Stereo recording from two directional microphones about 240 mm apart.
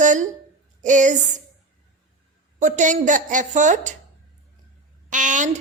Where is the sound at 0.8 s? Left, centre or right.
Right.